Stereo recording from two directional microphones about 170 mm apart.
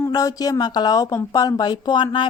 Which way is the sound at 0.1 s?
20° left (ahead or behind).